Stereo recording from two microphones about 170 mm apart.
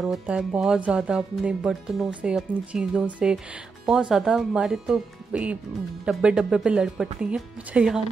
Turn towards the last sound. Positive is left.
turn(degrees=-5)  # may be behind; listen again after turning